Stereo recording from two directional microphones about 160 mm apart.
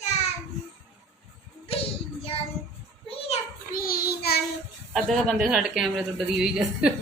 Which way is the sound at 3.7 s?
65° left (ahead or behind).